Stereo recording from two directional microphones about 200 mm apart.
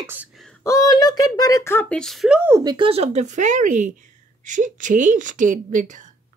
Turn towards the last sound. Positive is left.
turn(degrees=-40)  # may be behind; listen again after turning